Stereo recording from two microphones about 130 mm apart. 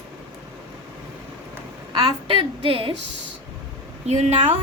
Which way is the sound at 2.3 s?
40° right (ahead or behind).